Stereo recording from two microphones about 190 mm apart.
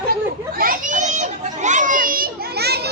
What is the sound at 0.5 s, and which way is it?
Children playing, 45° right (ahead or behind).